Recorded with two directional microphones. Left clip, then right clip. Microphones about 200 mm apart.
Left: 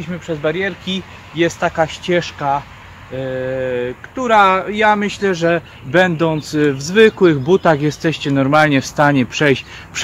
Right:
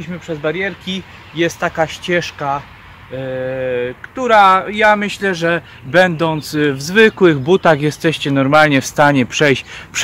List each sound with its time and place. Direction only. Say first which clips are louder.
0.0 s speech: left 1 dB; 20° right (ahead or behind); by 10.0 s 50° right (ahead or behind)